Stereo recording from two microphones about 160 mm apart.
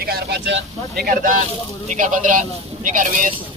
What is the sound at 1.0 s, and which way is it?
Speech, 60° right (ahead or behind).